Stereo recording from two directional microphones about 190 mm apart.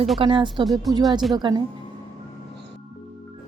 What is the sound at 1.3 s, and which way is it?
Speech, 20° right (ahead or behind).